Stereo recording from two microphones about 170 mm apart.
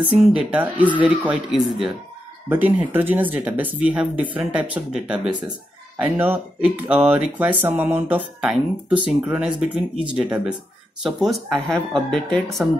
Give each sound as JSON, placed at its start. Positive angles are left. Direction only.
{"t": 0.0, "sound": "speech", "side_deg": -5}